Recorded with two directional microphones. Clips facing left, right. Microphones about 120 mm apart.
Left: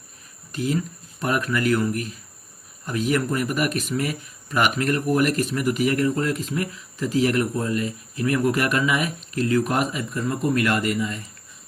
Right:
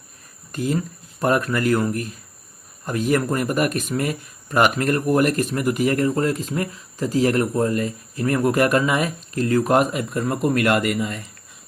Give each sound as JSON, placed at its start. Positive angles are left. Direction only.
{"t": 0.5, "sound": "speech", "side_deg": -45}
{"t": 10.0, "sound": "speech", "side_deg": -55}